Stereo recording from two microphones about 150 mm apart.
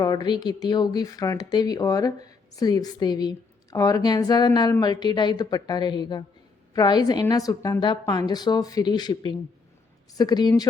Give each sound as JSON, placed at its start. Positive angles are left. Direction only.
{"t": 0.0, "sound": "speech", "side_deg": 30}